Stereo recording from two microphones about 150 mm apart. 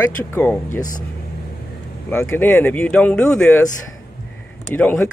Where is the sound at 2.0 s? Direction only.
15° left (ahead or behind).